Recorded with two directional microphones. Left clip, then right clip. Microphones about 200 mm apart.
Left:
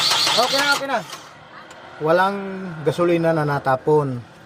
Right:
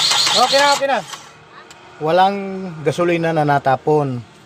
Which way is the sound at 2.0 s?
30° right (ahead or behind).